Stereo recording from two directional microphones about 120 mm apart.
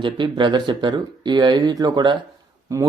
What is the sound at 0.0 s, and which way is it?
A man's voice, 40° right (ahead or behind).